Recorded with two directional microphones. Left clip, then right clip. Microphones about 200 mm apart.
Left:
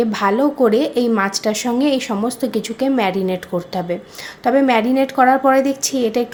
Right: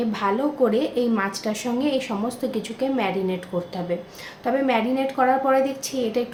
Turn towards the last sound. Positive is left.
turn(degrees=45)  # may be behind; listen again after turning